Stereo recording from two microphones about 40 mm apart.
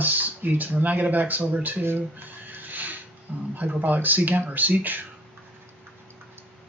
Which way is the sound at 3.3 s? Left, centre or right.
Right.